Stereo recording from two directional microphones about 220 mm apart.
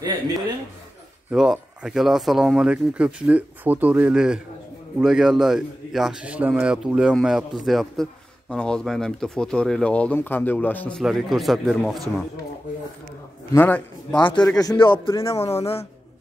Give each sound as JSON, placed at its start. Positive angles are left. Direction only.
{"t": 1.3, "sound": "a man's voice", "side_deg": -5}
{"t": 13.5, "sound": "a man's voice", "side_deg": 10}